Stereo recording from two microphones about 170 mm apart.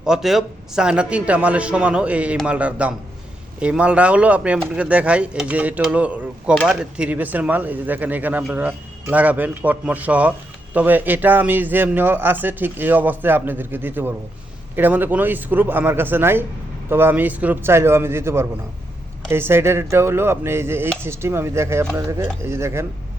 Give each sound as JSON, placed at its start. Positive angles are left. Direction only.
{"t": 0.0, "sound": "speech", "side_deg": -5}